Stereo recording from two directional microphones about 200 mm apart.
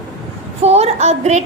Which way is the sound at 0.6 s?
30° right (ahead or behind).